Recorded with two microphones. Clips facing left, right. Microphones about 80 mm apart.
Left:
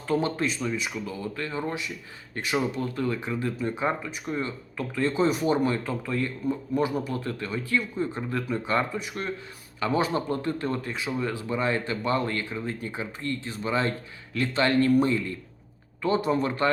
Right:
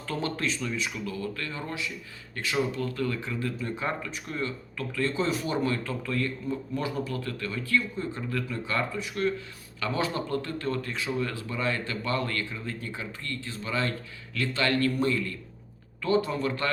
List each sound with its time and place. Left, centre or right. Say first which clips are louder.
0.1 s speech: left 5 dB; centre